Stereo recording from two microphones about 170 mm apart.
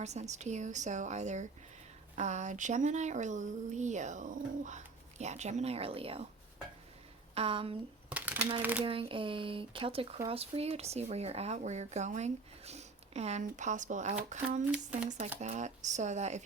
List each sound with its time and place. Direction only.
0.0 s speech: 40° right (ahead or behind)
7.3 s speech: 35° right (ahead or behind)
8.1 s a sound: 10° right (ahead or behind)
8.8 s speech: 35° right (ahead or behind)
14.7 s speech: 5° right (ahead or behind)
15.4 s speech: 45° right (ahead or behind)